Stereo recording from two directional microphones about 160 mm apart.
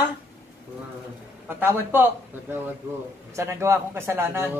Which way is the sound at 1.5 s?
15° right (ahead or behind).